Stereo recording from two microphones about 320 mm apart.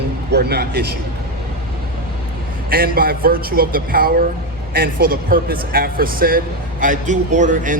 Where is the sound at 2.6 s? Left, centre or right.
Right.